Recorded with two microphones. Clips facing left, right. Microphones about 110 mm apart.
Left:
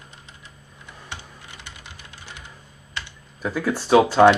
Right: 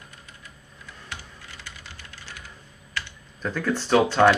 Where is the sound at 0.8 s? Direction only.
25° left (ahead or behind).